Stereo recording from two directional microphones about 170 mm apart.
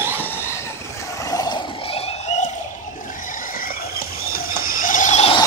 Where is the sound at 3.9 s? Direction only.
60° left (ahead or behind); by 5.4 s 40° left (ahead or behind).